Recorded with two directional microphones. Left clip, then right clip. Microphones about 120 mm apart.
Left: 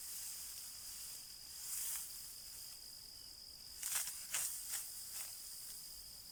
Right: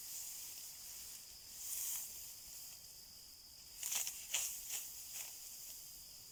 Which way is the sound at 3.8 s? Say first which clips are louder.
Right 2 dB; 25° right (ahead or behind).